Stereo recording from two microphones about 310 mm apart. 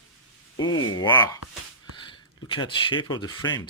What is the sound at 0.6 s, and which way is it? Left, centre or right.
Speech, left.